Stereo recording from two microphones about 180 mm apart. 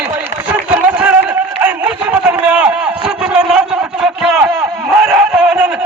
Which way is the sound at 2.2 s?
5° right (ahead or behind).